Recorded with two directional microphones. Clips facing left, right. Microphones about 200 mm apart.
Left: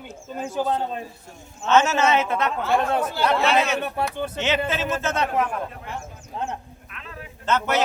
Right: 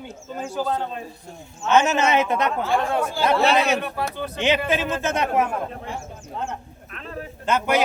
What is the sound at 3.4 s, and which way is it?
Speech, 35° right (ahead or behind).